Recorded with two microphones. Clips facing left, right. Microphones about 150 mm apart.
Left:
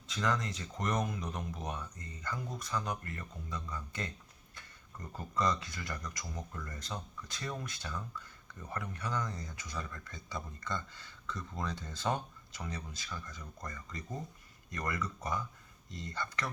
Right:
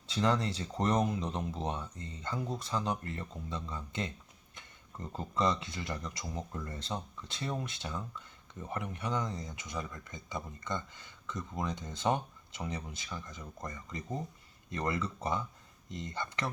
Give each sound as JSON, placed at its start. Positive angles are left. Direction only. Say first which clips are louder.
{"t": 0.1, "sound": "speech", "louder": "right 4 dB", "side_deg": -30}